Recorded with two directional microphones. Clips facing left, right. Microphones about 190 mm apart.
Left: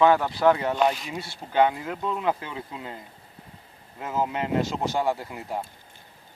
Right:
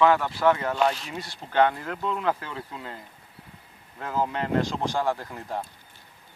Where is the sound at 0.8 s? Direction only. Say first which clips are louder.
Left 1 dB; 10° left (ahead or behind).